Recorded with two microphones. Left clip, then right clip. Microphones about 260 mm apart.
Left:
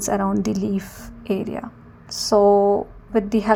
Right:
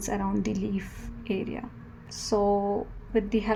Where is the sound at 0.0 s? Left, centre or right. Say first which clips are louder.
Left 8 dB; left.